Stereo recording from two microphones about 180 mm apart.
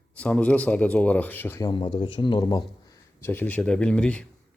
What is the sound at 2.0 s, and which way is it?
Speech, 25° left (ahead or behind).